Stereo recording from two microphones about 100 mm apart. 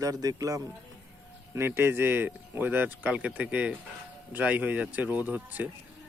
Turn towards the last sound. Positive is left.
turn(degrees=-15)  # may be behind; listen again after turning